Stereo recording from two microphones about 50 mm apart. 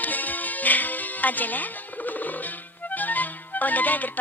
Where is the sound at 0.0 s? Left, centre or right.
Left.